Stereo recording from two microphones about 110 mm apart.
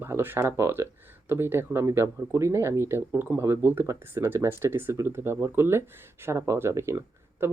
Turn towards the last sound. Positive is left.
turn(degrees=-25)  # may be behind; listen again after turning